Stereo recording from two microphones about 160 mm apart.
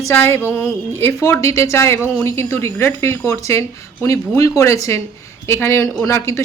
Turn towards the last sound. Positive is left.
turn(degrees=20)  # may be behind; listen again after turning